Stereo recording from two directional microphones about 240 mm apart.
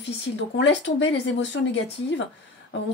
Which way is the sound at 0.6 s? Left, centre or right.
Left.